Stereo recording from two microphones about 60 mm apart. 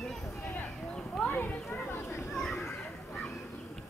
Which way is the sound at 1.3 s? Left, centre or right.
Left.